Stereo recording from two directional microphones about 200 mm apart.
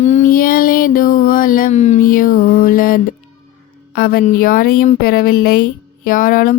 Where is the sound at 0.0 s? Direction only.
35° left (ahead or behind).